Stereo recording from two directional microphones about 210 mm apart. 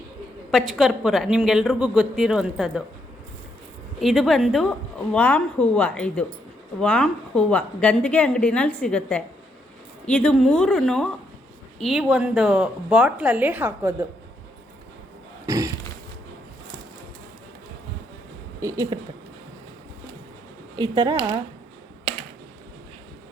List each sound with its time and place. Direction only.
0.5 s a woman's voice: centre (ahead or behind)
4.0 s a woman's voice: centre (ahead or behind)
15.4 s a sound: 15° right (ahead or behind)
18.6 s speech: 15° right (ahead or behind)
20.7 s speech: 20° right (ahead or behind)